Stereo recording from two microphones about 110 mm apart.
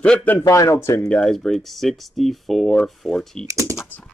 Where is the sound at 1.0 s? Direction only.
10° left (ahead or behind).